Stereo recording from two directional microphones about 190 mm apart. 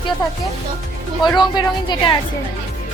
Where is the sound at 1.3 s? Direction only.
25° left (ahead or behind).